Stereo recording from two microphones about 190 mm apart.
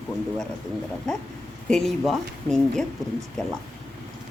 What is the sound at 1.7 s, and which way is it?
Speech, centre (ahead or behind).